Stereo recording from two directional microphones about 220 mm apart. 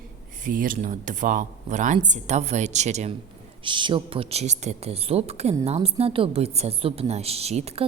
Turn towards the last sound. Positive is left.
turn(degrees=-30)  # may be behind; listen again after turning